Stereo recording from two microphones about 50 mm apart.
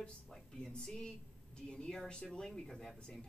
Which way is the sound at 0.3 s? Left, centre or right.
Centre.